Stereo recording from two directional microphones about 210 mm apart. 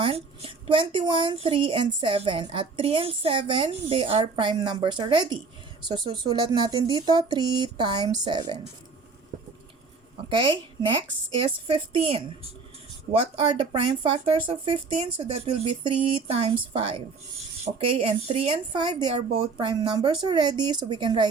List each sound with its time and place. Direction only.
0.0 s a woman's voice: 25° right (ahead or behind)
10.2 s a woman's voice: 25° right (ahead or behind)
13.3 s a woman's voice: 20° right (ahead or behind)